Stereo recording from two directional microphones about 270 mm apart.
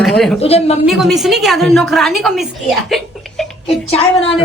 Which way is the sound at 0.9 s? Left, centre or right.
Centre.